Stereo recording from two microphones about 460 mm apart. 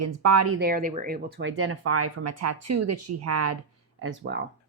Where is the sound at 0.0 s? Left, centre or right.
Right.